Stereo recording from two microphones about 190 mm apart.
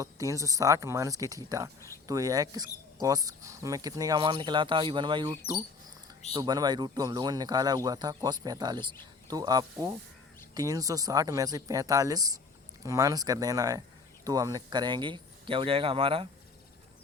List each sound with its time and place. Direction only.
0.0 s speech: 15° right (ahead or behind)